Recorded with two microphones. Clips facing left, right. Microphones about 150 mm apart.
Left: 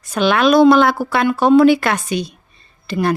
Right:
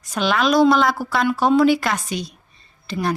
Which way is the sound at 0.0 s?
65° left (ahead or behind).